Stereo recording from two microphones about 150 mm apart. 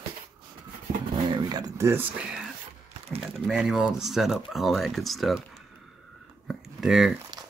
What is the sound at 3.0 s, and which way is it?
Speech, 40° right (ahead or behind).